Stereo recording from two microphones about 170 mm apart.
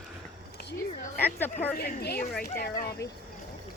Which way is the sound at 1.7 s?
65° left (ahead or behind).